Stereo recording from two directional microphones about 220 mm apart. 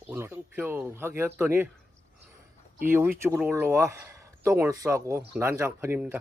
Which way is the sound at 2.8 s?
10° right (ahead or behind).